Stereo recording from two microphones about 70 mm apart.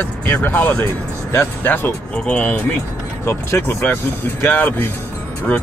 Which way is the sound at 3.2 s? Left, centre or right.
Left.